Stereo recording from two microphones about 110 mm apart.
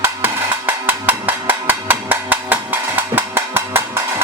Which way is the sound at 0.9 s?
15° right (ahead or behind).